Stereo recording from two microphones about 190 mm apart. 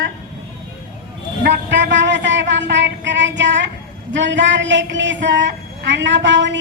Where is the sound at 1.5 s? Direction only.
65° right (ahead or behind).